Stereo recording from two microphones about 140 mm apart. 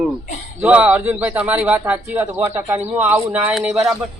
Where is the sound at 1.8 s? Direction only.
20° right (ahead or behind).